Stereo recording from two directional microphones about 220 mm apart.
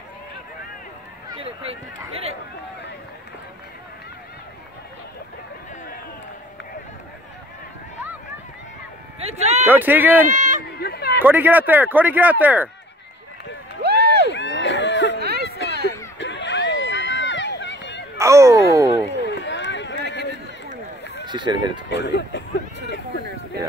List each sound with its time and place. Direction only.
1.3 s speech: 25° right (ahead or behind)
9.2 s speech: 30° right (ahead or behind)
9.7 s speech: 10° right (ahead or behind)
10.3 s speech: 35° right (ahead or behind)
10.8 s speech: 45° left (ahead or behind)
11.2 s speech: 10° right (ahead or behind)
13.8 s a sound: 45° right (ahead or behind)
14.2 s a sound: 55° left (ahead or behind)
15.1 s a sound: 45° right (ahead or behind)
16.2 s run: 55° left (ahead or behind)
18.1 s cat: 15° right (ahead or behind)
19.2 s run: 55° left (ahead or behind)
21.3 s speech: 20° right (ahead or behind)
21.9 s speech: 50° left (ahead or behind)